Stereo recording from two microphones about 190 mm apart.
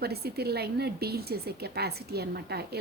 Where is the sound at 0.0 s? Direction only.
55° right (ahead or behind).